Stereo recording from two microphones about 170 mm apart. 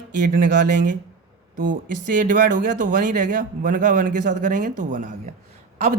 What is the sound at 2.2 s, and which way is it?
Speech, 50° right (ahead or behind).